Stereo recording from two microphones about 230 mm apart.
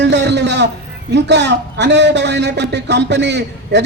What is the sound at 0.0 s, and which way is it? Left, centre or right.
A man's voice, right.